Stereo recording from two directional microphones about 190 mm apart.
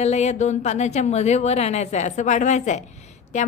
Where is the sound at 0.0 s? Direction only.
35° left (ahead or behind).